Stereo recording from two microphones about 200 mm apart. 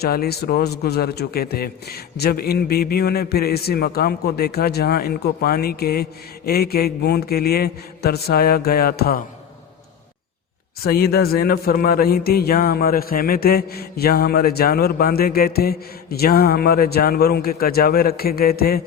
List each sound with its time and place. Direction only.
0.0 s speech: 50° left (ahead or behind)
10.8 s speech: 50° left (ahead or behind)